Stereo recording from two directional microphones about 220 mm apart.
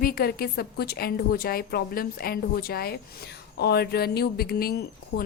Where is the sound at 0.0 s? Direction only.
40° left (ahead or behind).